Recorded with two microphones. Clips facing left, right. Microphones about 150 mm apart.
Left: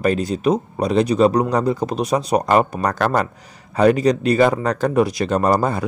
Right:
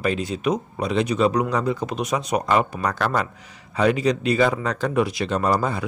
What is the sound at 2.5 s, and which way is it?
Speech, 45° left (ahead or behind).